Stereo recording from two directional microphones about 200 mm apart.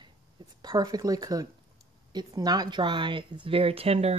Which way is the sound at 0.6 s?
20° right (ahead or behind).